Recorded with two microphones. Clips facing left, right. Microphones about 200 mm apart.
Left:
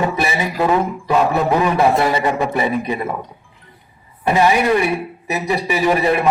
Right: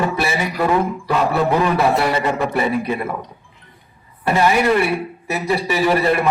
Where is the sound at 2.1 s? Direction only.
15° left (ahead or behind).